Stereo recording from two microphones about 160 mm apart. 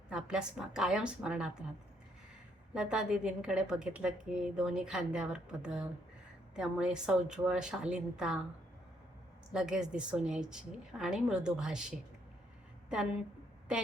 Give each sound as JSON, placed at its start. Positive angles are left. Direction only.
{"t": 0.1, "sound": "a woman's voice", "side_deg": -5}
{"t": 2.7, "sound": "a woman's voice", "side_deg": -5}
{"t": 9.5, "sound": "a woman's voice", "side_deg": -5}